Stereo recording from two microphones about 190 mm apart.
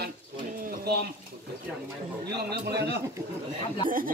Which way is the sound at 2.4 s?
60° right (ahead or behind).